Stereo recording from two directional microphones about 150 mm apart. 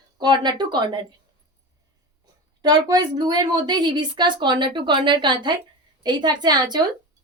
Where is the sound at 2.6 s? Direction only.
25° right (ahead or behind).